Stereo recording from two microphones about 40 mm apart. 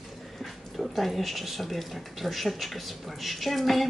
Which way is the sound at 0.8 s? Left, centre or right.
Centre.